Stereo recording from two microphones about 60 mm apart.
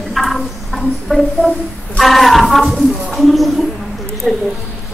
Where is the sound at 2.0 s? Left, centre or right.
Centre.